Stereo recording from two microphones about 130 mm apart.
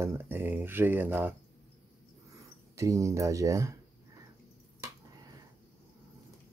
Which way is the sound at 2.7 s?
25° right (ahead or behind).